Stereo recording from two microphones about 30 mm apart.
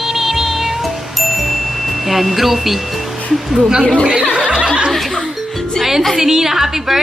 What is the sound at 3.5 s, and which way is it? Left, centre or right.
Speech, right.